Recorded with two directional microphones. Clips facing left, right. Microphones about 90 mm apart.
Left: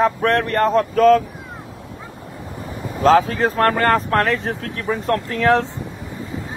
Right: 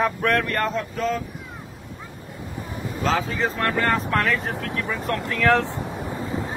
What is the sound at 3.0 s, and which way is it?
Speech, 50° left (ahead or behind).